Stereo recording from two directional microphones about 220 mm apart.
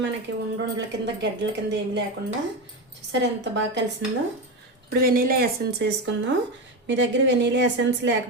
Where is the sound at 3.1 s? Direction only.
55° right (ahead or behind).